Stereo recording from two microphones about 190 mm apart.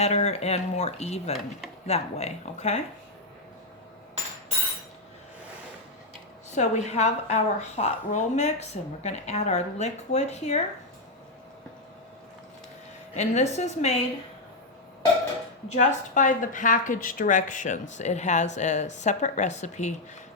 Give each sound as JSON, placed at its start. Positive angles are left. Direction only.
{"t": 0.0, "sound": "a woman's voice", "side_deg": 35}
{"t": 6.5, "sound": "a woman's voice", "side_deg": 35}
{"t": 13.1, "sound": "a woman's voice", "side_deg": 35}
{"t": 15.7, "sound": "a woman's voice", "side_deg": 40}